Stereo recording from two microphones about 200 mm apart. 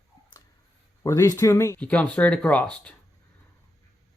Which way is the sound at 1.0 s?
15° left (ahead or behind).